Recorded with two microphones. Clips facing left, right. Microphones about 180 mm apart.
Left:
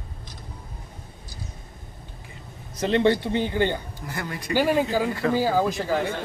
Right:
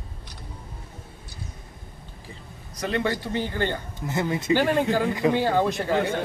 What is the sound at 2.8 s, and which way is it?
A man's voice, 25° left (ahead or behind).